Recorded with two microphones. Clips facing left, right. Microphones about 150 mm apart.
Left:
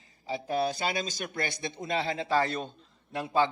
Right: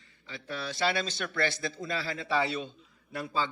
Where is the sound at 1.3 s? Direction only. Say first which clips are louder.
Right 4 dB; 20° left (ahead or behind).